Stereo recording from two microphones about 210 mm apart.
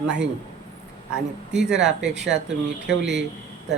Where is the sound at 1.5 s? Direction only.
5° right (ahead or behind).